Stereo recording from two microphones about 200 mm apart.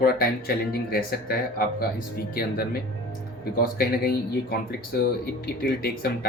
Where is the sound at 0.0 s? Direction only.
50° left (ahead or behind).